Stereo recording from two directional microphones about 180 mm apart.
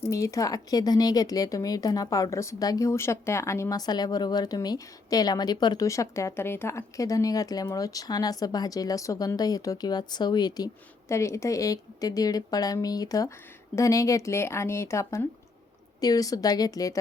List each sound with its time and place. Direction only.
0.1 s speech: 20° left (ahead or behind)